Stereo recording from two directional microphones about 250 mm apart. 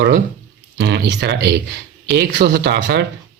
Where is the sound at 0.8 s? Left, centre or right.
Right.